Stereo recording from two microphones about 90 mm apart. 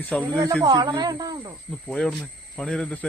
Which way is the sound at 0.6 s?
55° right (ahead or behind).